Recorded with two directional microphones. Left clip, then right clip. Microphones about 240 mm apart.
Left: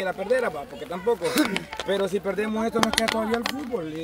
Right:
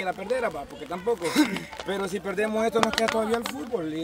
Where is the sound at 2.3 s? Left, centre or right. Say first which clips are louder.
Right 2 dB; right.